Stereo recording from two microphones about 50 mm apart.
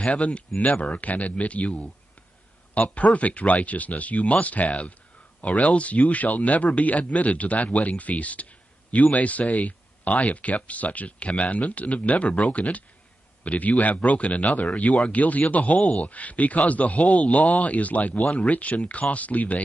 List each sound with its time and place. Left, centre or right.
0.0 s speech: left